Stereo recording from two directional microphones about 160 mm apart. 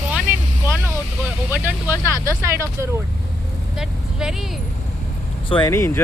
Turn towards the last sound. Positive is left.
turn(degrees=15)  # may be behind; listen again after turning